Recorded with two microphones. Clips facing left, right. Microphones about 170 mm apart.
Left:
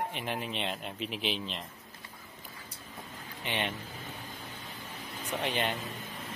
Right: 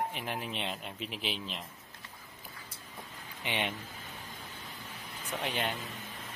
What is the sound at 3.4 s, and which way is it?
Speech, 15° right (ahead or behind).